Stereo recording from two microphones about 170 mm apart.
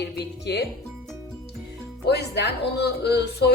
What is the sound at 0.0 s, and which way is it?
Speech, 85° left.